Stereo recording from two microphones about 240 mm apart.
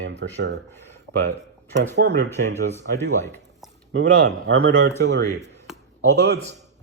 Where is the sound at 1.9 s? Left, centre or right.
Right.